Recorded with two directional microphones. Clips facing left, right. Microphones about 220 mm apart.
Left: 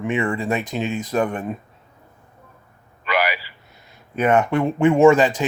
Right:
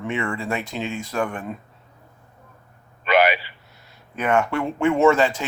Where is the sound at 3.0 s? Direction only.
25° right (ahead or behind).